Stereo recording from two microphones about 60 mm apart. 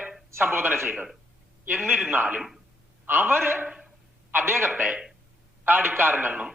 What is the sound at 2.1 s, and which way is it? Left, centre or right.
A man's voice, right.